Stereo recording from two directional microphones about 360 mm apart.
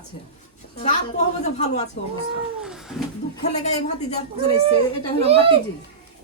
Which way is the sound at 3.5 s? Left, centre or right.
Centre.